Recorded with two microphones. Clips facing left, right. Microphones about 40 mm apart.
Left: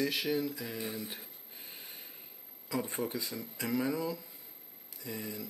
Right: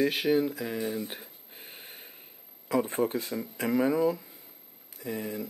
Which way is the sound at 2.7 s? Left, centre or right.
Right.